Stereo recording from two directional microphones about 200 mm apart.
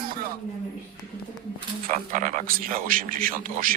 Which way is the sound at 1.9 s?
40° right (ahead or behind).